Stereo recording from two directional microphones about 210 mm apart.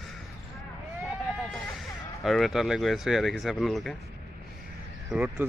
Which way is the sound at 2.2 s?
Centre (ahead or behind).